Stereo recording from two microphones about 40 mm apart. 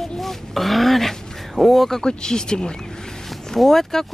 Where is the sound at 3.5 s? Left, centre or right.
Centre.